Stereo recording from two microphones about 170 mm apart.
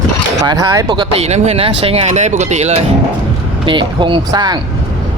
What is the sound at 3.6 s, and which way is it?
Speech, 30° right (ahead or behind).